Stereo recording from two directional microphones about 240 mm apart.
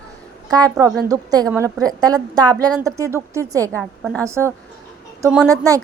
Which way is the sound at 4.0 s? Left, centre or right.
Centre.